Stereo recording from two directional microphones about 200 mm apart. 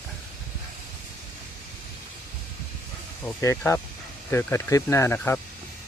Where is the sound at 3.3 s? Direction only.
10° left (ahead or behind).